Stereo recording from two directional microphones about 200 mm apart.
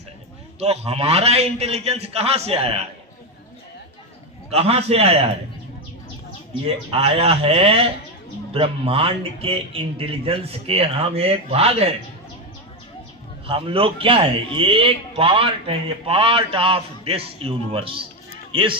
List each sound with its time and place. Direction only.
0.6 s a man's voice: 30° right (ahead or behind)
4.5 s a man's voice: 30° right (ahead or behind)
6.7 s a man's voice: 30° right (ahead or behind)
13.5 s a man's voice: 25° right (ahead or behind)